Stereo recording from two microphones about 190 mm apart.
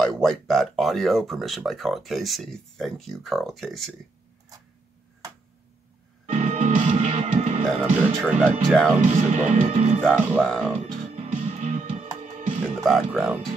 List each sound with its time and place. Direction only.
0.2 s speech: centre (ahead or behind)
6.2 s music: 40° right (ahead or behind)
7.6 s speech: 5° right (ahead or behind)
9.1 s speech: 40° right (ahead or behind)
10.0 s speech: 5° left (ahead or behind)
11.1 s music: 35° right (ahead or behind)
12.8 s speech: centre (ahead or behind)